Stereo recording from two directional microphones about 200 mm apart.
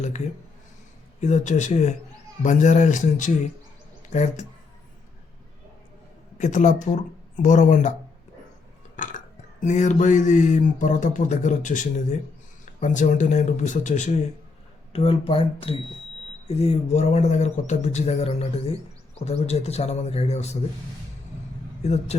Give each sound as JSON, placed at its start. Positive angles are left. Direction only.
{"t": 1.2, "sound": "speech", "side_deg": 35}
{"t": 6.4, "sound": "speech", "side_deg": 35}
{"t": 9.0, "sound": "speech", "side_deg": 40}
{"t": 21.8, "sound": "speech", "side_deg": 30}